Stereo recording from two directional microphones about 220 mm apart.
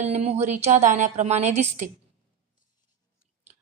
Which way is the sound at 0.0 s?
30° right (ahead or behind).